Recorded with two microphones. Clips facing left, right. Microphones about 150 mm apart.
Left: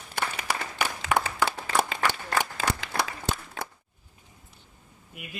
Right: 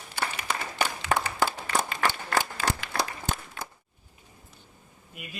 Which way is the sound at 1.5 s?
90° left.